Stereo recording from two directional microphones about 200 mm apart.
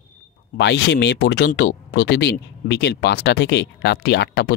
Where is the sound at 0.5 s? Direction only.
55° left (ahead or behind).